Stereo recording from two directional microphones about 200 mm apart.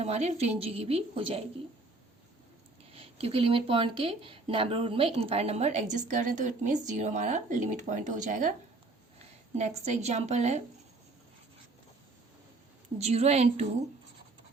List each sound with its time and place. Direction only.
0.0 s speech: 35° right (ahead or behind)
2.9 s speech: 30° right (ahead or behind)
9.6 s speech: 35° right (ahead or behind)
13.0 s speech: 30° right (ahead or behind)